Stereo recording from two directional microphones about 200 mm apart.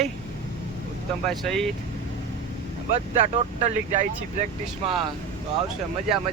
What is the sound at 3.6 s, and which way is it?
Speech, 35° right (ahead or behind).